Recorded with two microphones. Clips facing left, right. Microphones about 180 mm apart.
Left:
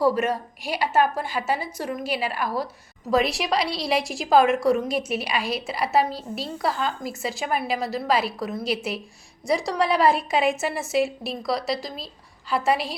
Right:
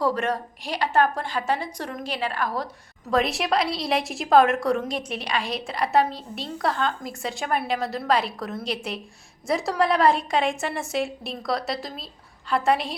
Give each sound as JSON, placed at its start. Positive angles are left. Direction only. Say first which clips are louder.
{"t": 0.0, "sound": "a woman's voice", "louder": "left 3 dB", "side_deg": 10}